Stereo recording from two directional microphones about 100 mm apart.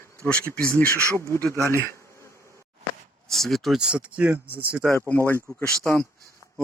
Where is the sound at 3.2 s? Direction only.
Centre (ahead or behind); by 4.8 s 15° right (ahead or behind).